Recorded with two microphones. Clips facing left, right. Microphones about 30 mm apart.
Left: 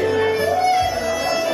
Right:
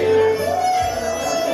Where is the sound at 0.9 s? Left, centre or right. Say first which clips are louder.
Left 1 dB; left.